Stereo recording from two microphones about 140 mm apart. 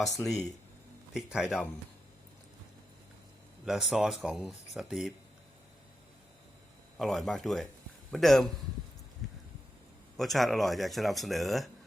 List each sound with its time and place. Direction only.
0.2 s speech: 20° left (ahead or behind)
1.1 s speech: 5° right (ahead or behind)
3.7 s speech: 5° right (ahead or behind)
6.9 s speech: centre (ahead or behind)
10.2 s speech: centre (ahead or behind)